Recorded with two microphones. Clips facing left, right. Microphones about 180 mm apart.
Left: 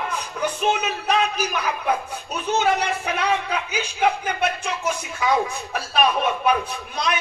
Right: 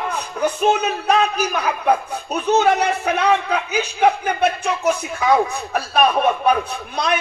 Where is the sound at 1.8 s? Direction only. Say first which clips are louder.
Right 5 dB; 55° right (ahead or behind).